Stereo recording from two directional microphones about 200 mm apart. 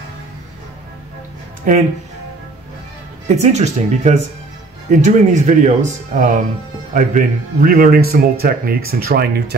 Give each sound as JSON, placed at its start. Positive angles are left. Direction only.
{"t": 1.6, "sound": "speech", "side_deg": -40}
{"t": 3.3, "sound": "speech", "side_deg": -35}